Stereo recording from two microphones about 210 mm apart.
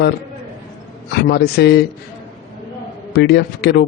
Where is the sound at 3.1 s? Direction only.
50° left (ahead or behind).